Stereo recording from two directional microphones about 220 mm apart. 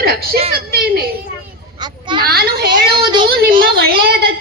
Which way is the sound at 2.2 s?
45° right (ahead or behind).